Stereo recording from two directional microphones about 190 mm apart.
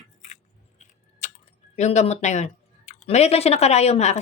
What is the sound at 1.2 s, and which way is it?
Tick-tock, 40° left (ahead or behind).